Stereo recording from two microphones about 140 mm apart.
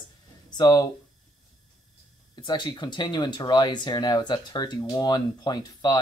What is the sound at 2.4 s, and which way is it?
Speech, 30° left (ahead or behind).